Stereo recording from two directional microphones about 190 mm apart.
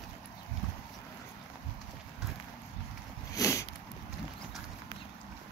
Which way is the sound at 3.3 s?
15° left (ahead or behind).